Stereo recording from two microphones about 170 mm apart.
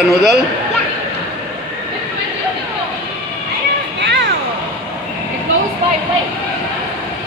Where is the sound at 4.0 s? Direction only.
90° right.